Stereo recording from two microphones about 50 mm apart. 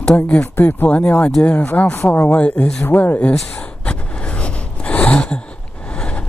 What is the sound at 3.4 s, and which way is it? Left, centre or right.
Gasp, left.